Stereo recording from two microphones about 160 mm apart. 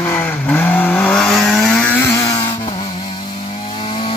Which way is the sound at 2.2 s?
25° left (ahead or behind).